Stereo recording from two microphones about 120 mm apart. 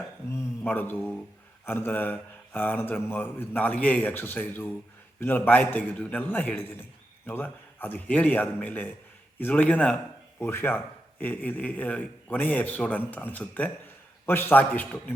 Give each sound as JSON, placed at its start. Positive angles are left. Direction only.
{"t": 0.6, "sound": "a man's voice", "side_deg": 15}